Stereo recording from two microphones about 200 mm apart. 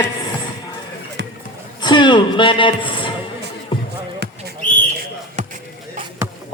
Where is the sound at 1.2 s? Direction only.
60° right (ahead or behind).